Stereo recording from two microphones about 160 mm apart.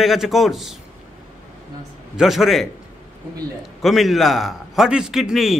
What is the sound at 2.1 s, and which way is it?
Speech, centre (ahead or behind).